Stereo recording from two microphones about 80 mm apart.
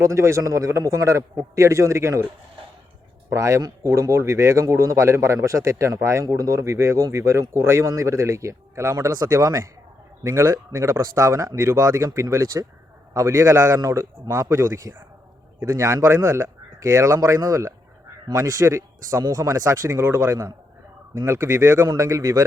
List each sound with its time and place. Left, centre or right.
0.0 s speech: right
3.2 s speech: right